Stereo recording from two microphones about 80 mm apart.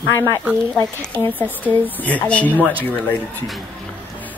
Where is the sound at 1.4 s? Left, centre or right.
Centre.